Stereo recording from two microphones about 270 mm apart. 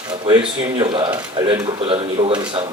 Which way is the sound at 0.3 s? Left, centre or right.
Centre.